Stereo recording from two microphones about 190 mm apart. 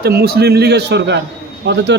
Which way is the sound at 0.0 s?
55° right (ahead or behind).